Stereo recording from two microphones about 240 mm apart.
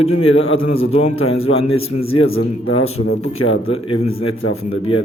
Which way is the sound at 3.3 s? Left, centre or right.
Left.